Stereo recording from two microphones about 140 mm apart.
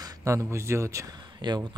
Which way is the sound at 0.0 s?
20° right (ahead or behind).